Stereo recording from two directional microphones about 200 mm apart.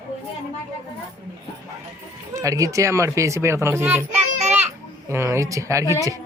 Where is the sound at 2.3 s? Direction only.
15° right (ahead or behind).